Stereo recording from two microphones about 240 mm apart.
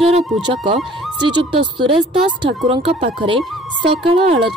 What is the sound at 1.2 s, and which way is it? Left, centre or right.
Speech, centre.